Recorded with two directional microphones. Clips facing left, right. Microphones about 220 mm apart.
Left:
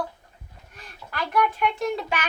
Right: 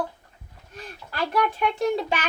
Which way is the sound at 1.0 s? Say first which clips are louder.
Even; 30° right (ahead or behind).